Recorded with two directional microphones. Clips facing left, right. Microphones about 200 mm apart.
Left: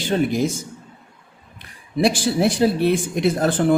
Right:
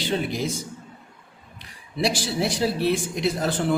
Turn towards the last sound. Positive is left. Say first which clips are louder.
# left 5 dB
turn(degrees=50)  # may be behind; listen again after turning